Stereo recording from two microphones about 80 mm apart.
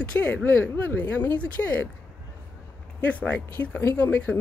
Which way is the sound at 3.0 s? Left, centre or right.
Centre.